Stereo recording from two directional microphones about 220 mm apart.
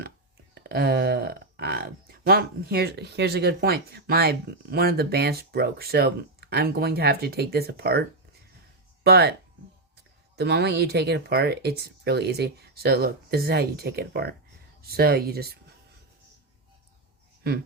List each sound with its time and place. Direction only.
0.5 s speech: 45° right (ahead or behind)
9.0 s speech: 45° right (ahead or behind)
10.3 s speech: 50° right (ahead or behind)